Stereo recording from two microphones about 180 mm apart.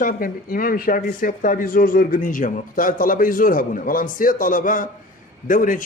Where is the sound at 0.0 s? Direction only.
50° left (ahead or behind).